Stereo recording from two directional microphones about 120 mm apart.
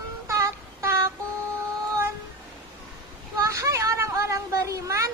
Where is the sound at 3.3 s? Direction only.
25° right (ahead or behind).